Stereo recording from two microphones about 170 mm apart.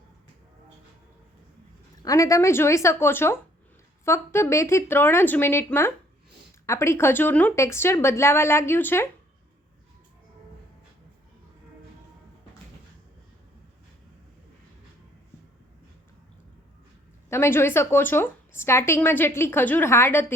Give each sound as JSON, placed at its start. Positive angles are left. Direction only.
{"t": 2.0, "sound": "a woman's voice", "side_deg": 20}
{"t": 17.2, "sound": "a woman's voice", "side_deg": 15}